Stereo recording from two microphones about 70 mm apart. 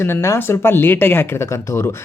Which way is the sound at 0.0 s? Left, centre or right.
Left.